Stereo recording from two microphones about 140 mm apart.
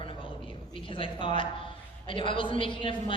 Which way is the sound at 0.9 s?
35° left (ahead or behind).